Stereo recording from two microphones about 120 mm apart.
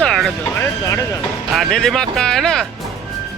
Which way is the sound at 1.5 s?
Centre (ahead or behind).